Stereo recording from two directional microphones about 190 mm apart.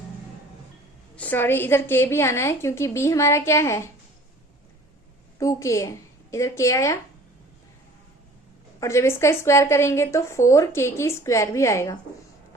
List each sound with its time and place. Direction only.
1.1 s a woman's voice: 10° left (ahead or behind)
5.4 s a woman's voice: 15° left (ahead or behind)
8.8 s a woman's voice: 15° left (ahead or behind)